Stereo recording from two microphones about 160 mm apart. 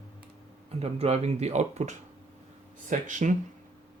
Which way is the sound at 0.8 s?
40° right (ahead or behind).